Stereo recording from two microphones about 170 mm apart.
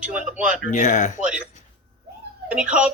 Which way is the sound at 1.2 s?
5° right (ahead or behind).